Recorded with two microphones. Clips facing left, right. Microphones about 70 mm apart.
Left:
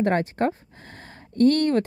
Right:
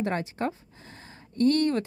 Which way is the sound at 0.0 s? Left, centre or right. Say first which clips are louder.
Left 7 dB; left.